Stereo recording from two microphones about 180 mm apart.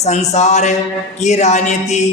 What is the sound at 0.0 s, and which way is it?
A woman's voice, 35° left (ahead or behind).